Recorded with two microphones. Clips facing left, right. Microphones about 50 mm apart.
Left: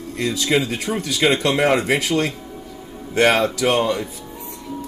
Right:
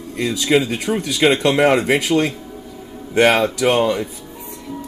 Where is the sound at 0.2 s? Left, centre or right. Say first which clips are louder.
Right 3 dB; centre.